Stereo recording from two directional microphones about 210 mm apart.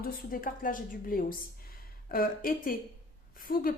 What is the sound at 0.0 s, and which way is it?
A woman's voice, 40° left (ahead or behind).